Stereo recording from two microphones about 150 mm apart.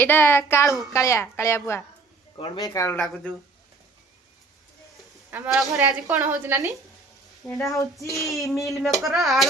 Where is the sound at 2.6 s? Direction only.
20° left (ahead or behind).